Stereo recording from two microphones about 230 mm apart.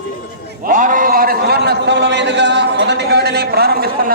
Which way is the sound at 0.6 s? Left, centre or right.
Right.